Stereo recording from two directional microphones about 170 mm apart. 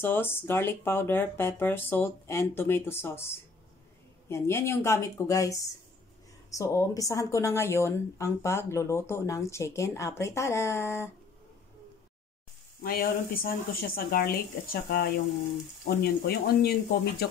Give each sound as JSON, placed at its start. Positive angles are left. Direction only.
{"t": 0.0, "sound": "a woman's voice", "side_deg": 15}
{"t": 4.3, "sound": "a woman's voice", "side_deg": 15}
{"t": 12.8, "sound": "speech", "side_deg": 60}
{"t": 15.8, "sound": "speech", "side_deg": 80}